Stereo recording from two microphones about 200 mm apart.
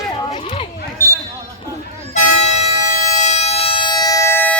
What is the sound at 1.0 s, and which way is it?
Basketball bounce, 15° right (ahead or behind).